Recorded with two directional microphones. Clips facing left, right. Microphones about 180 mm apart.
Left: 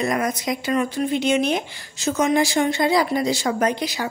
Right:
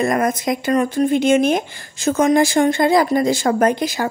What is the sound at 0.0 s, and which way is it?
Speech, 50° right (ahead or behind).